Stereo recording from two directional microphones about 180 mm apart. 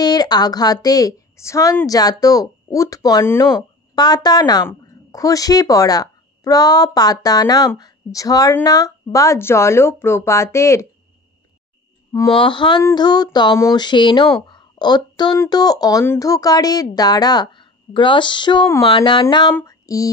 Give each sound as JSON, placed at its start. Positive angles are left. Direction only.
{"t": 0.0, "sound": "a woman's voice", "side_deg": 20}
{"t": 12.1, "sound": "a woman's voice", "side_deg": 25}
{"t": 19.5, "sound": "a sound", "side_deg": 20}